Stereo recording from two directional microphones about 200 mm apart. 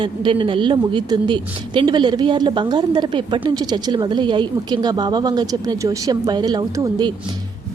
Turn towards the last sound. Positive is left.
turn(degrees=-20)  # may be behind; listen again after turning